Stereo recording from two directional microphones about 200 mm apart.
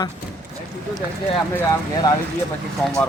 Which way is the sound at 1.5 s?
10° left (ahead or behind).